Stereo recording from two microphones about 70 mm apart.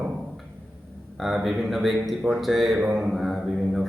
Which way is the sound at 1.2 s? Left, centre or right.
Centre.